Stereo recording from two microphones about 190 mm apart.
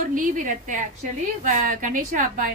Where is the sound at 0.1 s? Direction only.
45° right (ahead or behind).